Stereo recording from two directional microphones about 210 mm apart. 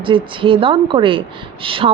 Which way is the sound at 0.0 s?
25° right (ahead or behind).